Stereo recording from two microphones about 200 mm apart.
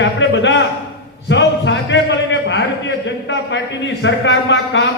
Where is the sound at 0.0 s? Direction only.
65° left (ahead or behind).